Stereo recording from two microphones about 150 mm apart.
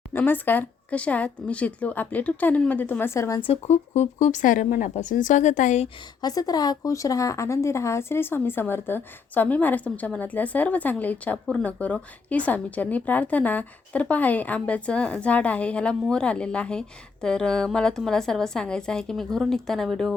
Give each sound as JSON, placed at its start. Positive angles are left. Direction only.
{"t": 0.1, "sound": "speech", "side_deg": 10}
{"t": 3.4, "sound": "speech", "side_deg": 45}
{"t": 6.2, "sound": "speech", "side_deg": 25}